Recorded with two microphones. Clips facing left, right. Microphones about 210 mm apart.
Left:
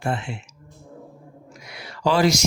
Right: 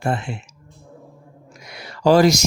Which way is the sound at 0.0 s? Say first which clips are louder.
Right 3 dB; 40° right (ahead or behind).